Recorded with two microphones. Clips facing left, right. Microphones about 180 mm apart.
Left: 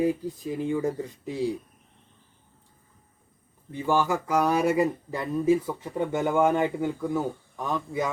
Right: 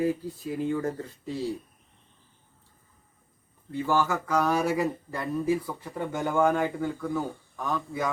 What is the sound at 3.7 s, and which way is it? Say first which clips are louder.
Speech: left 1 dB; 15° left (ahead or behind).